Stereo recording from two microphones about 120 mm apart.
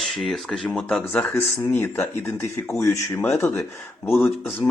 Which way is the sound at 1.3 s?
20° left (ahead or behind).